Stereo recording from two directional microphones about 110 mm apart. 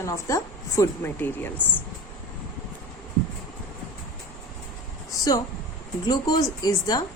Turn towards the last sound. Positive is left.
turn(degrees=35)  # may be behind; listen again after turning